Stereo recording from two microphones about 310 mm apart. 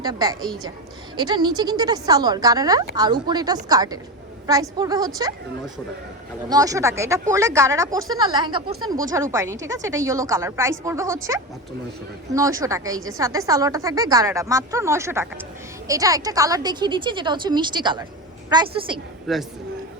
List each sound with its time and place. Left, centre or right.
0.0 s a woman's voice: centre
6.5 s a woman's voice: centre
12.3 s a woman's voice: centre
19.3 s a man's voice: centre